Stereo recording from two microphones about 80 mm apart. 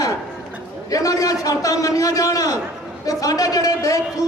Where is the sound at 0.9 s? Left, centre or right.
Left.